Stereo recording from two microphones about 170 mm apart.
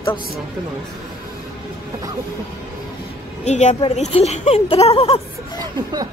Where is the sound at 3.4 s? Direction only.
45° left (ahead or behind).